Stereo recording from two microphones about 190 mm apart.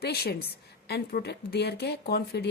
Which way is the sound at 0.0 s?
55° left (ahead or behind).